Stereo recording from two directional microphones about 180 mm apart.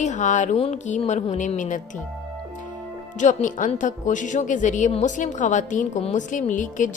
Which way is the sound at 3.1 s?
45° left (ahead or behind).